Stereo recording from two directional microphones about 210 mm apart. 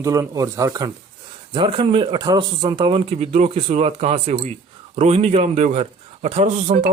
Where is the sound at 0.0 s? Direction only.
15° right (ahead or behind).